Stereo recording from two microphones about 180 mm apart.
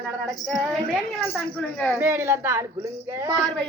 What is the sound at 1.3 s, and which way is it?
Speech, 10° left (ahead or behind).